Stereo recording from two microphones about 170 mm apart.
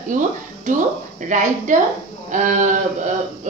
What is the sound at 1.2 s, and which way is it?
A woman's voice, 50° right (ahead or behind).